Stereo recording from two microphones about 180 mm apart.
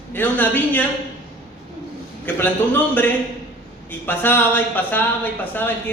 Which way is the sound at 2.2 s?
10° left (ahead or behind).